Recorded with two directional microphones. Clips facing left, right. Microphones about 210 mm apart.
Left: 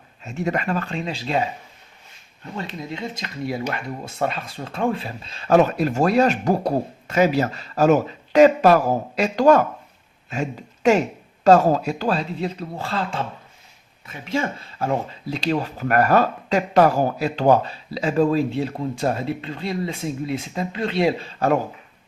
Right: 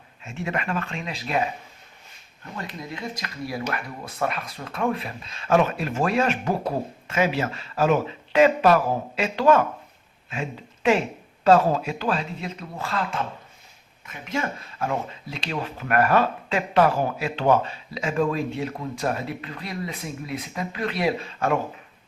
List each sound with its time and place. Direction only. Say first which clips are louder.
0.2 s speech: left 5 dB; 40° left (ahead or behind)
2.6 s speech: left 4 dB; 25° left (ahead or behind)